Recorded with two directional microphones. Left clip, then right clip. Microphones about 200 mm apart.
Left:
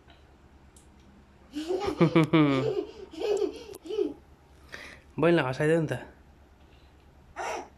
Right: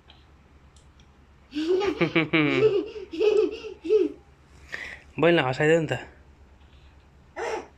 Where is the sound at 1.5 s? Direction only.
15° left (ahead or behind).